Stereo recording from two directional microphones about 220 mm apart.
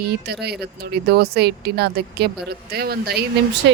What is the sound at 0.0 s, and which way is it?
Speech, 45° right (ahead or behind).